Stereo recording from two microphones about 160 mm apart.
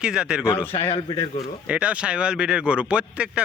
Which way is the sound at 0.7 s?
35° left (ahead or behind).